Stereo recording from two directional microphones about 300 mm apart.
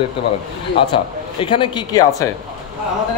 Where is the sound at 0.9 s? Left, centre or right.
Centre.